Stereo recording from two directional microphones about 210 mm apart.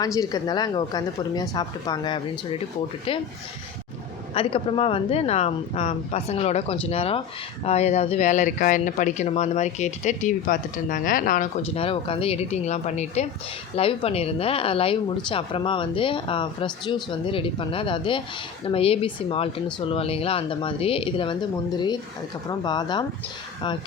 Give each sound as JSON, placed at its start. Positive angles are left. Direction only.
{"t": 0.0, "sound": "a woman's voice", "side_deg": 20}
{"t": 4.4, "sound": "a woman's voice", "side_deg": 25}
{"t": 11.7, "sound": "a woman's voice", "side_deg": 25}